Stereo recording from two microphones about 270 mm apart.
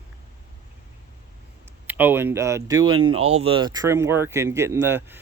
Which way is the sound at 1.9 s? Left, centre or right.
Centre.